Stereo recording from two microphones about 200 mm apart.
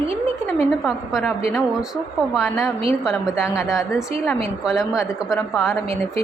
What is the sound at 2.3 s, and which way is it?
A woman's voice, centre (ahead or behind).